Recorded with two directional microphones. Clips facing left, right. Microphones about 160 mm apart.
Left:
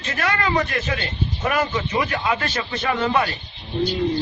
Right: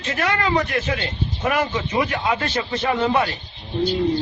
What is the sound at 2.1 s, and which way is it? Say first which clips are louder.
A man's voice: right 1 dB; 20° right (ahead or behind).